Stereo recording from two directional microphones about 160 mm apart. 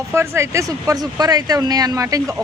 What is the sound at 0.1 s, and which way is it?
A woman's voice, 15° right (ahead or behind).